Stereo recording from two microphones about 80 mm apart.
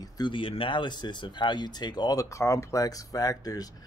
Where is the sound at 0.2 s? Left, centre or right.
Left.